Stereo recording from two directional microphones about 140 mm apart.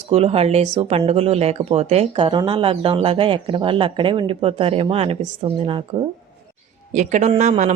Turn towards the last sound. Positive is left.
turn(degrees=-60)  # may be behind; listen again after turning